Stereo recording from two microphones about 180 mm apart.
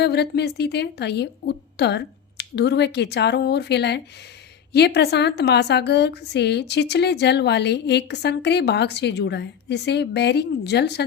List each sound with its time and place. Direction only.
0.0 s a woman's voice: 65° left (ahead or behind)